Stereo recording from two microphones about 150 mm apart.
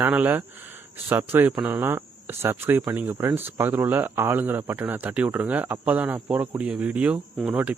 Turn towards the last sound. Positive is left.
turn(degrees=-10)  # may be behind; listen again after turning